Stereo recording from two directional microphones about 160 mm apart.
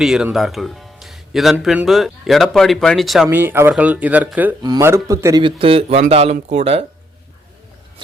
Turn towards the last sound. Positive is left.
turn(degrees=-40)  # may be behind; listen again after turning